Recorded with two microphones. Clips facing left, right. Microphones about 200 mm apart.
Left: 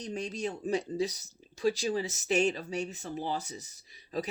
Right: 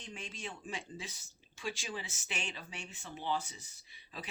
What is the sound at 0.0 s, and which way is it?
Speech, 40° left (ahead or behind).